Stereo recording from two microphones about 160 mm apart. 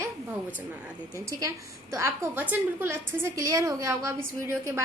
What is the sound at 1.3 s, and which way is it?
A woman's voice, 20° right (ahead or behind).